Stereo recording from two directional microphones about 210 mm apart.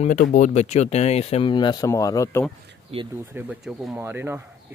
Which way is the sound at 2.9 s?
30° right (ahead or behind).